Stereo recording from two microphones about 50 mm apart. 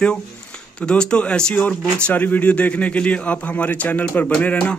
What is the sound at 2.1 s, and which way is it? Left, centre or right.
Speech, left.